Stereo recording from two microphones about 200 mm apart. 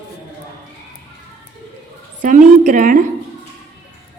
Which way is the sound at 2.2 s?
40° right (ahead or behind).